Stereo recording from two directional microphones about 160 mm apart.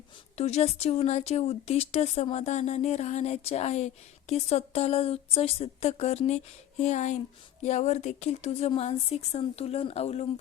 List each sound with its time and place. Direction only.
0.3 s speech: 40° left (ahead or behind)